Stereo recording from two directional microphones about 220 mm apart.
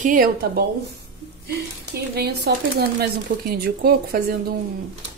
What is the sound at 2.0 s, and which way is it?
A woman's voice, 45° right (ahead or behind).